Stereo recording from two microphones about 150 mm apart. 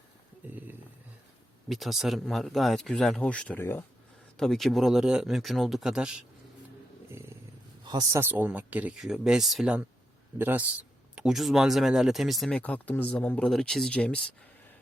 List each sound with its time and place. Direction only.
1.7 s speech: centre (ahead or behind); by 3.8 s 15° left (ahead or behind)
4.4 s speech: centre (ahead or behind)
7.9 s speech: 25° right (ahead or behind)
8.2 s speech: 10° right (ahead or behind); by 14.2 s 10° left (ahead or behind)